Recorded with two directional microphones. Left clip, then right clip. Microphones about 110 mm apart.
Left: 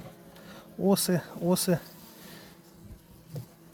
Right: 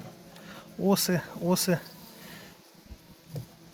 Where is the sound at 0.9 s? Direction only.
35° left (ahead or behind).